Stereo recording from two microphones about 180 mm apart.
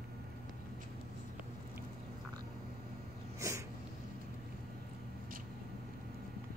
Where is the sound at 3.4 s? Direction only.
15° right (ahead or behind).